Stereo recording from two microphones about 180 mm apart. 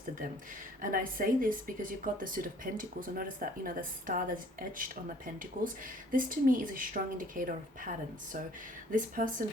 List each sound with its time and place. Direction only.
0.8 s speech: 50° right (ahead or behind)